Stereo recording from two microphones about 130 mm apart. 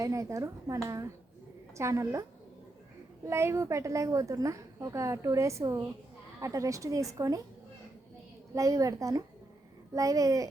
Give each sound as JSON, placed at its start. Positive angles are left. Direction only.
{"t": 0.0, "sound": "a woman's voice", "side_deg": -25}
{"t": 3.2, "sound": "a woman's voice", "side_deg": -20}
{"t": 8.5, "sound": "a woman's voice", "side_deg": -25}